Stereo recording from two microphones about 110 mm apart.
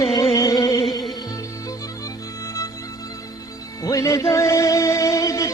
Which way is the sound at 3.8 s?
30° left (ahead or behind).